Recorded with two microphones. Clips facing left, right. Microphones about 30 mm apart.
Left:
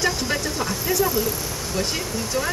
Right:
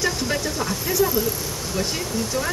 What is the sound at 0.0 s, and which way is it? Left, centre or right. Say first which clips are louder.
Vehicle: even; centre.